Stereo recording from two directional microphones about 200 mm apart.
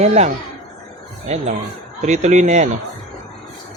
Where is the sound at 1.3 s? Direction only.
35° right (ahead or behind).